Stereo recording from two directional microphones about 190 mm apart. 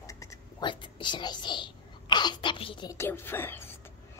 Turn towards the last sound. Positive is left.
turn(degrees=10)  # may be behind; listen again after turning